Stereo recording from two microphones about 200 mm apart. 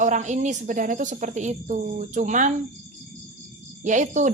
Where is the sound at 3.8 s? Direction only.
40° right (ahead or behind).